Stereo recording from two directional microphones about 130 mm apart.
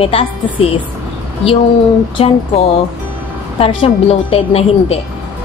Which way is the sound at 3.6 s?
45° left (ahead or behind).